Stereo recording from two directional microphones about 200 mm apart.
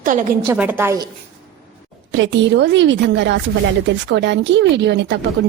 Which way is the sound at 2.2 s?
65° right (ahead or behind).